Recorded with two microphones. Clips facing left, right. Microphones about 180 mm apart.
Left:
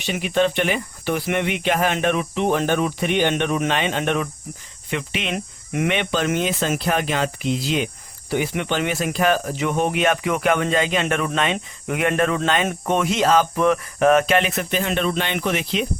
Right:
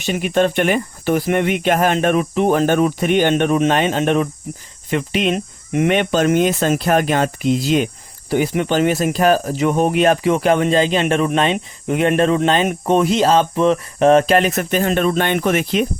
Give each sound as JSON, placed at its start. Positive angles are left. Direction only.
{"t": 0.0, "sound": "speech", "side_deg": -45}
{"t": 5.3, "sound": "speech", "side_deg": -30}
{"t": 5.9, "sound": "speech", "side_deg": -45}